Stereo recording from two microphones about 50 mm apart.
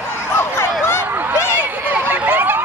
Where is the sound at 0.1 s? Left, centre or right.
Left.